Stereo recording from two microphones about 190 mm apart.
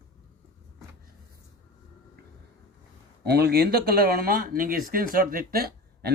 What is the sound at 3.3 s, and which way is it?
Speech, 60° right (ahead or behind).